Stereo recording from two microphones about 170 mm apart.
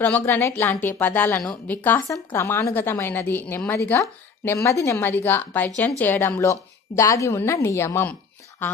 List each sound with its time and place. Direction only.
0.0 s a woman's voice: 10° left (ahead or behind)